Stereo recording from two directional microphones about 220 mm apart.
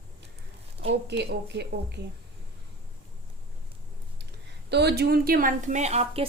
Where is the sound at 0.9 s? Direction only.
50° right (ahead or behind).